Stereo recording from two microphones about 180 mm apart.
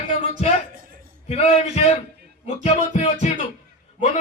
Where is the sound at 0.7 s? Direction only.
50° right (ahead or behind).